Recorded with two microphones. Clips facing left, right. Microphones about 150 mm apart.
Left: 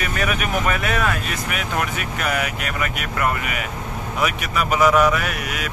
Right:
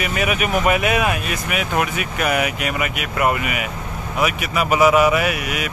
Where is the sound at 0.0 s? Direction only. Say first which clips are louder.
Right 3 dB; 10° right (ahead or behind).